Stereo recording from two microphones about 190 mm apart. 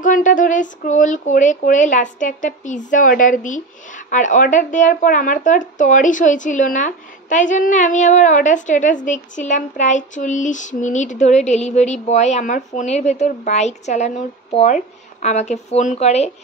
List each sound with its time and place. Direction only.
0.0 s speech: 45° left (ahead or behind)